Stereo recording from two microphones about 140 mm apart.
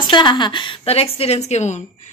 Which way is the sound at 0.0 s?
35° left (ahead or behind).